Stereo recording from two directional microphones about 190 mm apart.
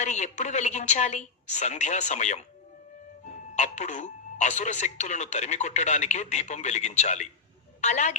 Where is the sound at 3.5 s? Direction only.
40° left (ahead or behind).